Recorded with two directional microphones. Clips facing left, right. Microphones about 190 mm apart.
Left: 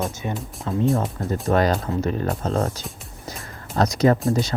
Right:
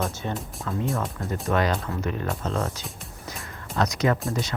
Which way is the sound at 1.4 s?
35° left (ahead or behind).